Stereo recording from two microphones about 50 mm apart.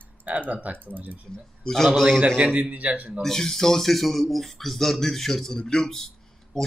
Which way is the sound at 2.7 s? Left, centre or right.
Right.